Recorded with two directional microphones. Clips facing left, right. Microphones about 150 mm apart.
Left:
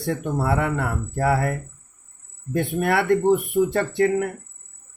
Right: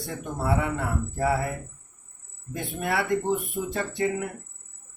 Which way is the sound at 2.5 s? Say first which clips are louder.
Left 7 dB; 60° left (ahead or behind).